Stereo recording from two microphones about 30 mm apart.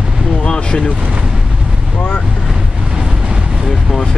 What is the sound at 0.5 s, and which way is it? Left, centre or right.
Vehicle, left.